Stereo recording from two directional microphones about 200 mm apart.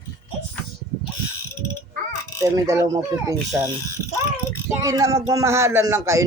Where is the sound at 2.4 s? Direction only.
15° right (ahead or behind).